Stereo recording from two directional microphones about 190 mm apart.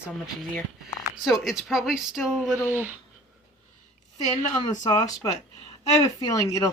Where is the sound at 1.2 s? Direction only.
Centre (ahead or behind).